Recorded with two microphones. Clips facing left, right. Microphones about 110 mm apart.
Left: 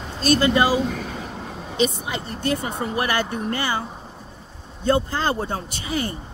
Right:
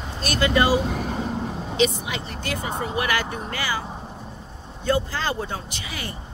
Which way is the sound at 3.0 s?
30° left (ahead or behind).